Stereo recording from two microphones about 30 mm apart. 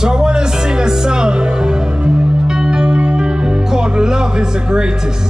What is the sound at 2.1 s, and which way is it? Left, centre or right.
Music, right.